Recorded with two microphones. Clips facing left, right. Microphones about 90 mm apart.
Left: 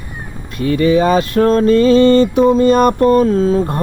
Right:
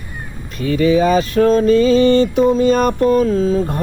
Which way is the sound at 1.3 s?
50° left (ahead or behind).